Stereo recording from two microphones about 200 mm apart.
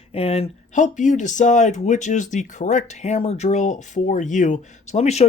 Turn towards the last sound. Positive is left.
turn(degrees=35)  # may be behind; listen again after turning